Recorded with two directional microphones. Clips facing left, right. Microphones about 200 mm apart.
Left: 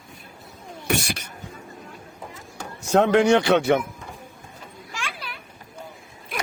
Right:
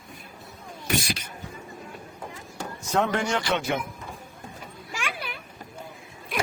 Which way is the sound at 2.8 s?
70° left (ahead or behind).